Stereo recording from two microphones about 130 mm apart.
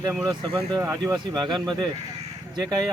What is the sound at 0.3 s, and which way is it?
Speech, 30° right (ahead or behind).